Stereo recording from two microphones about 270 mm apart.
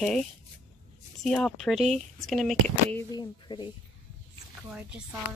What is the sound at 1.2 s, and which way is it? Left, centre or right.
Speech, centre.